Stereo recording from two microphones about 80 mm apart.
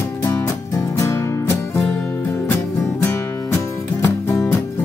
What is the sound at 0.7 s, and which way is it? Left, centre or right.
Music, left.